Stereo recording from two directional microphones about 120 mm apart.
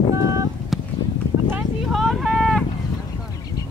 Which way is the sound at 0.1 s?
25° right (ahead or behind).